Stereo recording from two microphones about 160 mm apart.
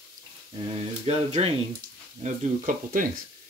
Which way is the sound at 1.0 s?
40° right (ahead or behind).